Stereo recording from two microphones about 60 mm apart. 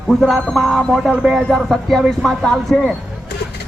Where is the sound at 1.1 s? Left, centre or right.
Centre.